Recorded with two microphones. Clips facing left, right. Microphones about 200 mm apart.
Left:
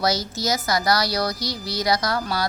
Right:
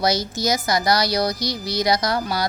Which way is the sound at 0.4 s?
15° right (ahead or behind).